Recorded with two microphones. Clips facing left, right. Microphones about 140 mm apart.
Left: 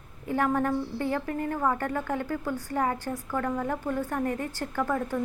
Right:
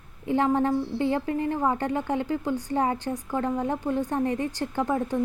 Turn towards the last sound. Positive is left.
turn(degrees=-20)  # may be behind; listen again after turning